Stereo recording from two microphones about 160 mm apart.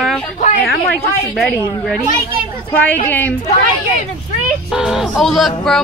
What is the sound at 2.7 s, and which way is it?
Speech, 10° left (ahead or behind).